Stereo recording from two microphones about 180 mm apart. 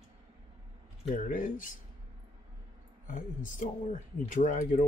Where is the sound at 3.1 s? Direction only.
45° left (ahead or behind).